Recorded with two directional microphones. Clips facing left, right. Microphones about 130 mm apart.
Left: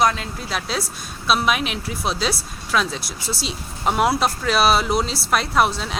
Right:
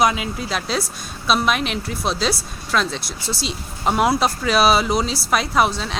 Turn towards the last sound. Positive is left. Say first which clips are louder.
# right 1 dB
turn(degrees=0)  # may be behind; listen again after turning